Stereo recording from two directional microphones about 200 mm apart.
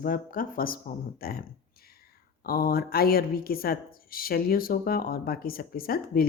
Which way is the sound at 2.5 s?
50° left (ahead or behind).